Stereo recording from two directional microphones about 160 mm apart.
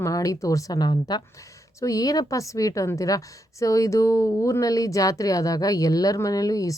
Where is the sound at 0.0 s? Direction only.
20° left (ahead or behind).